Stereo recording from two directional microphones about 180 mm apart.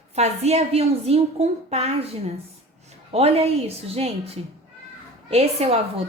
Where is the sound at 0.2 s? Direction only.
35° right (ahead or behind).